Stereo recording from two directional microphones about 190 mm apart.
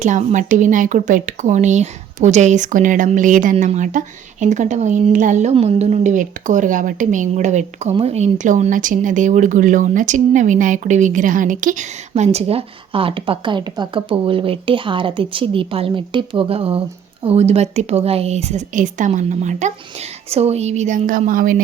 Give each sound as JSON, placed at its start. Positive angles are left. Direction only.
{"t": 0.0, "sound": "speech", "side_deg": -40}